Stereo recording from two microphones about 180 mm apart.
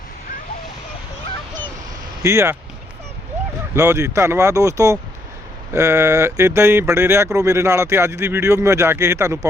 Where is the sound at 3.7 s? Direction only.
15° right (ahead or behind).